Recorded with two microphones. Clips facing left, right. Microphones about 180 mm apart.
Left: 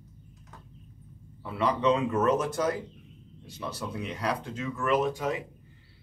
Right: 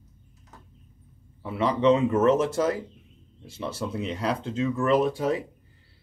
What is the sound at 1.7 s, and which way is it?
Speech, 25° right (ahead or behind).